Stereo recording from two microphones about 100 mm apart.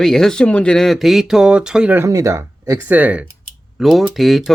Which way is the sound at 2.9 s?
15° right (ahead or behind).